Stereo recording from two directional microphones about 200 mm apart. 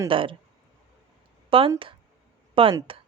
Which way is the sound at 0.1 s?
25° right (ahead or behind).